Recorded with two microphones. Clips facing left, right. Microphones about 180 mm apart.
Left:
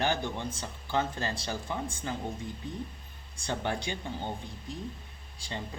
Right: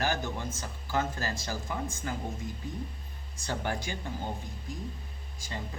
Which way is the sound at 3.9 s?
20° left (ahead or behind).